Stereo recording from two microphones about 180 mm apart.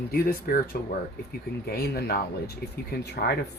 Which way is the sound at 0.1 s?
60° left (ahead or behind).